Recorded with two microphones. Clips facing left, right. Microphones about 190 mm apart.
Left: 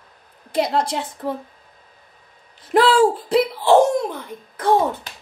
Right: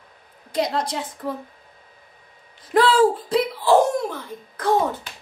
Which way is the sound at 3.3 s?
25° left (ahead or behind).